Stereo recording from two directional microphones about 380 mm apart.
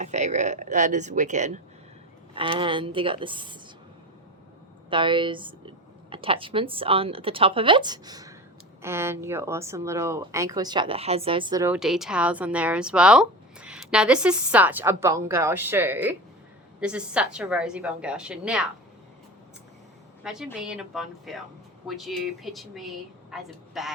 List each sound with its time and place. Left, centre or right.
0.0 s a woman's voice: centre
4.9 s a woman's voice: centre
20.2 s speech: centre